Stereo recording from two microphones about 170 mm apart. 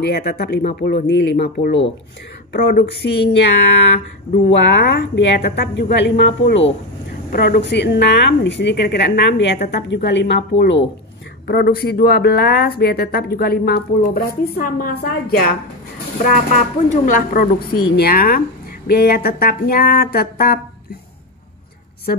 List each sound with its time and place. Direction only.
0.0 s speech: 75° left (ahead or behind)
4.5 s a woman's voice: 90° left
7.3 s a woman's voice: 75° left (ahead or behind)
11.4 s speech: 70° left (ahead or behind)
16.9 s a woman's voice: 50° left (ahead or behind)